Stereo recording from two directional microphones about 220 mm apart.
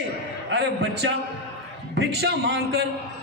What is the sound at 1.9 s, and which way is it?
Speech, 50° right (ahead or behind).